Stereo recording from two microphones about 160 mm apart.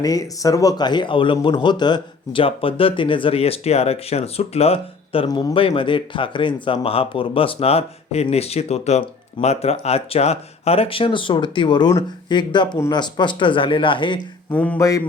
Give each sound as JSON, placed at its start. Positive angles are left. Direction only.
{"t": 0.0, "sound": "speech", "side_deg": 20}
{"t": 5.3, "sound": "speech", "side_deg": 25}
{"t": 5.5, "sound": "speech", "side_deg": 35}
{"t": 14.5, "sound": "speech", "side_deg": 10}
{"t": 14.8, "sound": "speech", "side_deg": 20}